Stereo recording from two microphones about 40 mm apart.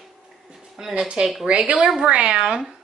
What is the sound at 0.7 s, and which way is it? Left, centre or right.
A woman's voice, centre.